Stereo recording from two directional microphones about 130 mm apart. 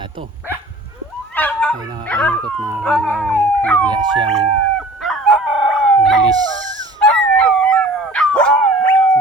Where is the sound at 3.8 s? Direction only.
35° right (ahead or behind).